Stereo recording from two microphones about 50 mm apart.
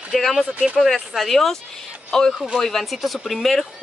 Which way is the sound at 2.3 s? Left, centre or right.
Centre.